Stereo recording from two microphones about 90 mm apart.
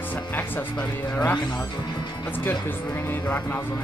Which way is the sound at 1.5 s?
50° left (ahead or behind).